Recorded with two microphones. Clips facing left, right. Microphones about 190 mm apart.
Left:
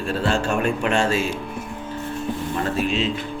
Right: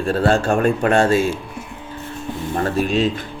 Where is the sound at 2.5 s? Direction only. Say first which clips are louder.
Right 5 dB; 45° right (ahead or behind).